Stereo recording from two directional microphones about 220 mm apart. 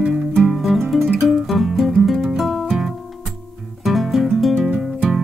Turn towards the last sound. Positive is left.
turn(degrees=0)  # may be behind; listen again after turning